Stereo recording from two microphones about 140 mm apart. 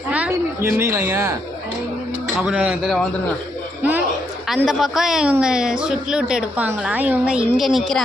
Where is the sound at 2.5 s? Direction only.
10° right (ahead or behind).